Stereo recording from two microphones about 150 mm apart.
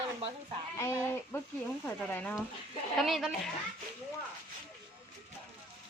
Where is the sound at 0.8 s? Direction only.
20° left (ahead or behind).